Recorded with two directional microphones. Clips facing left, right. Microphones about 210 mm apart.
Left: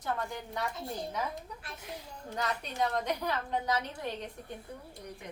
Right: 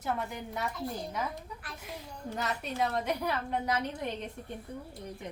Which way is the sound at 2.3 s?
5° right (ahead or behind).